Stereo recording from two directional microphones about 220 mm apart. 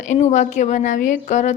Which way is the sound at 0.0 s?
35° left (ahead or behind).